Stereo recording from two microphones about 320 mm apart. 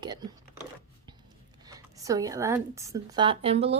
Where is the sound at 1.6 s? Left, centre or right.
Centre.